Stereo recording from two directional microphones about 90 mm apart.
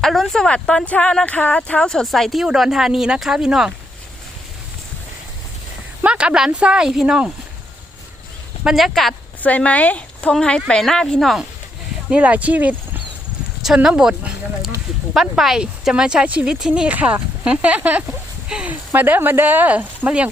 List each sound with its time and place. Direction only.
0.0 s speech: 5° left (ahead or behind)
6.0 s speech: 10° right (ahead or behind)
8.6 s speech: centre (ahead or behind)
9.4 s speech: 15° left (ahead or behind)
12.1 s speech: 15° right (ahead or behind)
18.4 s a sound: 10° right (ahead or behind)
18.9 s speech: 20° right (ahead or behind)